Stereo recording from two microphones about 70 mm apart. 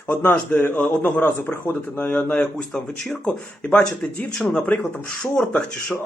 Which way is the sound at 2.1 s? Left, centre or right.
Centre.